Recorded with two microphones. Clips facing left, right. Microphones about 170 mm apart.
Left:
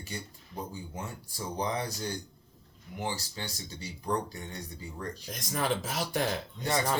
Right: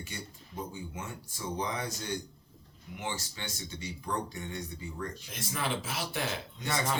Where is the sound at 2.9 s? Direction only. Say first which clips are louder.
Left 3 dB; 35° left (ahead or behind).